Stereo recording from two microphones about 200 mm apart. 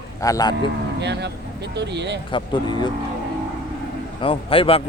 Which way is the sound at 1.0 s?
60° right (ahead or behind).